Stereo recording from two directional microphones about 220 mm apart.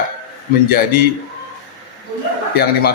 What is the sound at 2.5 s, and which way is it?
Speech, 45° left (ahead or behind).